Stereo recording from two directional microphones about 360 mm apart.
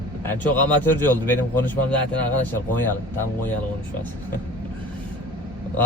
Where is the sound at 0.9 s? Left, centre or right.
Centre.